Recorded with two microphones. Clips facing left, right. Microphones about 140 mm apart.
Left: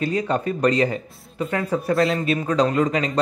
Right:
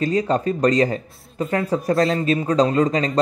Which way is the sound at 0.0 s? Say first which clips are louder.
Right 3 dB; 35° right (ahead or behind).